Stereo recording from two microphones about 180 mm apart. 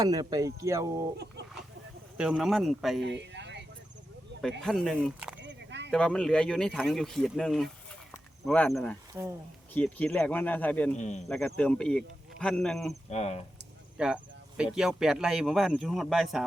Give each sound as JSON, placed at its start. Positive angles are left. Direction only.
{"t": 0.0, "sound": "speech", "side_deg": -20}
{"t": 2.1, "sound": "speech", "side_deg": -5}
{"t": 3.0, "sound": "a sound", "side_deg": -75}
{"t": 4.6, "sound": "speech", "side_deg": 0}
{"t": 5.4, "sound": "a sound", "side_deg": -75}
{"t": 5.9, "sound": "speech", "side_deg": 5}
{"t": 10.9, "sound": "speech", "side_deg": 40}
{"t": 11.3, "sound": "speech", "side_deg": 5}
{"t": 13.1, "sound": "speech", "side_deg": 35}
{"t": 13.9, "sound": "speech", "side_deg": -5}